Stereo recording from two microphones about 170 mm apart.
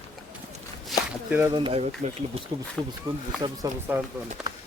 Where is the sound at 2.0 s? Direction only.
45° right (ahead or behind).